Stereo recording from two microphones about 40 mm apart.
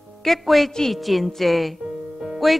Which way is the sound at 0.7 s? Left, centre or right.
Centre.